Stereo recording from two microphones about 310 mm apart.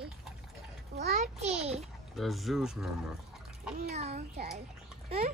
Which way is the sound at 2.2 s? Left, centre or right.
Centre.